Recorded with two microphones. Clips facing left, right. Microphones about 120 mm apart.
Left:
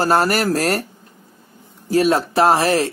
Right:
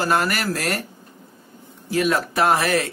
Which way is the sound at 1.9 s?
30° left (ahead or behind).